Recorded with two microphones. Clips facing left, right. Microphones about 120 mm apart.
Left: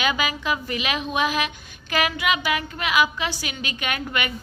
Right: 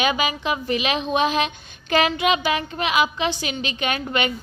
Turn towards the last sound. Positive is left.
turn(degrees=-25)  # may be behind; listen again after turning